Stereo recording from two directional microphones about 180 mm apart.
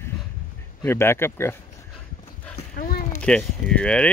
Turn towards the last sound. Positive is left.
turn(degrees=5)  # may be behind; listen again after turning